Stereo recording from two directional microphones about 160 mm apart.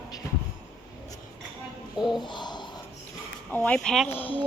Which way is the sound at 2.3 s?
25° left (ahead or behind).